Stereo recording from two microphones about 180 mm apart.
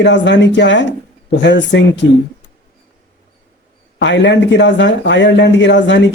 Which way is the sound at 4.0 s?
80° left.